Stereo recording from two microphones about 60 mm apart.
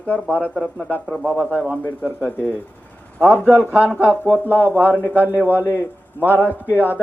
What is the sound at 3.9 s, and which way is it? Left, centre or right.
A man's voice, right.